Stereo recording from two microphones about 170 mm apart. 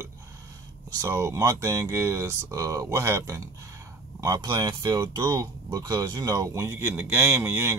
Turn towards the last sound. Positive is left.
turn(degrees=-15)  # may be behind; listen again after turning